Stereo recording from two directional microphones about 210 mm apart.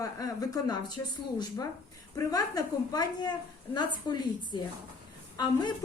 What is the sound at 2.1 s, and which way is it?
A woman's voice, 15° left (ahead or behind).